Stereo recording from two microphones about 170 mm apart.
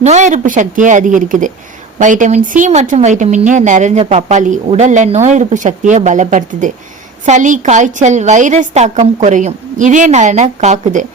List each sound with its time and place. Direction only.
0.0 s a woman's voice: 45° right (ahead or behind)